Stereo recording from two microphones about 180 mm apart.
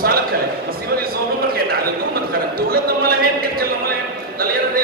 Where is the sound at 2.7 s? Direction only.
55° right (ahead or behind).